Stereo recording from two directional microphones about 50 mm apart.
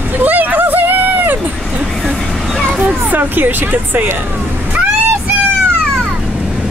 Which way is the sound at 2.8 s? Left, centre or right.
Right.